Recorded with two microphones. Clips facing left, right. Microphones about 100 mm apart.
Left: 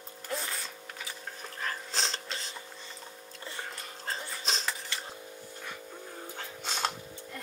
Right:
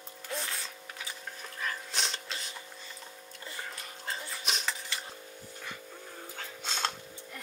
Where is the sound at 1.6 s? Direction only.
35° left (ahead or behind).